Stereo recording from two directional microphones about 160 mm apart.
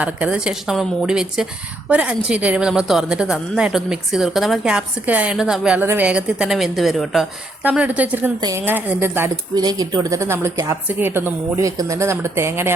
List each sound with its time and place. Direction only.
0.0 s a woman's voice: 5° right (ahead or behind)
8.4 s a woman's voice: 25° right (ahead or behind)
8.6 s a woman's voice: 10° right (ahead or behind)
9.6 s a woman's voice: 25° right (ahead or behind)